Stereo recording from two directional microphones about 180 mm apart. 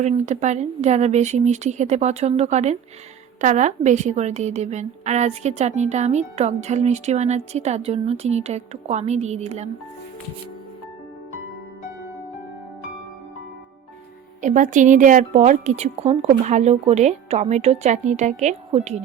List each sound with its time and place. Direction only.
0.0 s a woman's voice: 40° right (ahead or behind)
14.4 s a woman's voice: 45° right (ahead or behind)